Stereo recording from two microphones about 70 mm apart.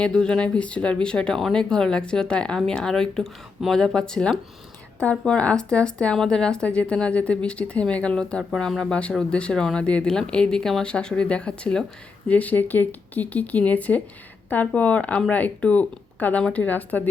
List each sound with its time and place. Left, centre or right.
0.0 s speech: centre